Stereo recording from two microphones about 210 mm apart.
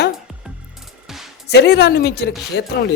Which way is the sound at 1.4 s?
50° left (ahead or behind).